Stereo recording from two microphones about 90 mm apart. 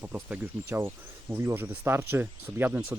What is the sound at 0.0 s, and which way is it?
Speech, 15° right (ahead or behind).